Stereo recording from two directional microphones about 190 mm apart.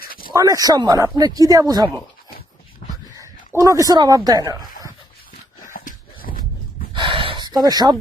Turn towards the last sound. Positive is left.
turn(degrees=-20)  # may be behind; listen again after turning